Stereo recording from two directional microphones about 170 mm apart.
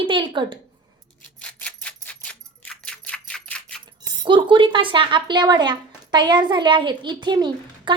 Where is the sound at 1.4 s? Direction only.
5° left (ahead or behind).